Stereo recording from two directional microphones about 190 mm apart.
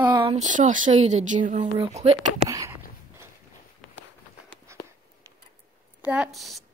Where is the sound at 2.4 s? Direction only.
15° right (ahead or behind).